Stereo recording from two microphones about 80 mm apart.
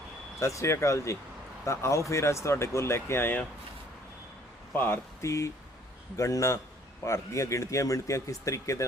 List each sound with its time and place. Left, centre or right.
0.3 s speech: left
4.7 s speech: left
5.2 s speech: left